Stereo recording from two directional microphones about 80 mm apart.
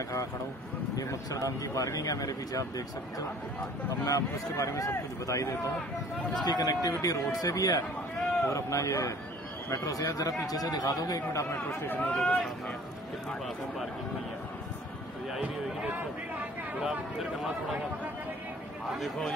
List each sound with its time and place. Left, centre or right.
0.9 s speech: left
4.0 s speech: left
6.3 s speech: left
11.8 s speech: left
15.4 s a sound: right
18.9 s speech: centre